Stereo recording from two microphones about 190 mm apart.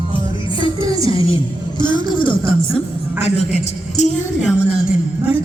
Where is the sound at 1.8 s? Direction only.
25° left (ahead or behind).